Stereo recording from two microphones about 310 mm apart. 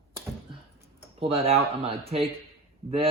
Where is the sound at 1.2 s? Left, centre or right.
Centre.